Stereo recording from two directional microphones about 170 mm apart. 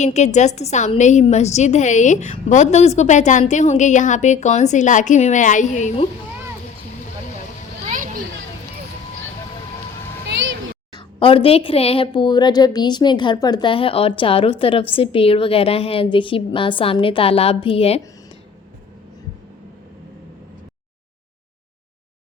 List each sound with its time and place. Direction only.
0.0 s a woman's voice: 45° left (ahead or behind)
7.9 s children playing: 50° right (ahead or behind)
10.2 s vehicle: 90° right
10.9 s a woman's voice: 30° left (ahead or behind)